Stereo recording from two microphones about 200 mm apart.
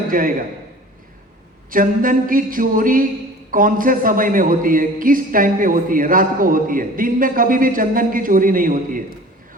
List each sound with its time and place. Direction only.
0.1 s a man's voice: 45° right (ahead or behind)
1.7 s a man's voice: 45° right (ahead or behind)